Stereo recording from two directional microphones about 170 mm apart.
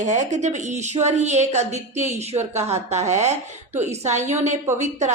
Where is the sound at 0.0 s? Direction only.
45° right (ahead or behind).